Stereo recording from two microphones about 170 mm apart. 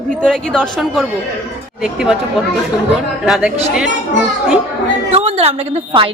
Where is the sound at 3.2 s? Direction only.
5° right (ahead or behind).